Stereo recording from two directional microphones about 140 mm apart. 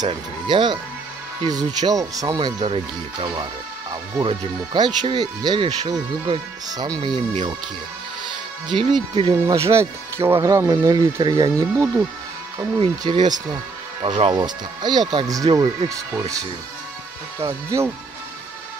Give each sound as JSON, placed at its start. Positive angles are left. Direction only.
{"t": 0.1, "sound": "speech", "side_deg": -35}
{"t": 8.7, "sound": "speech", "side_deg": -35}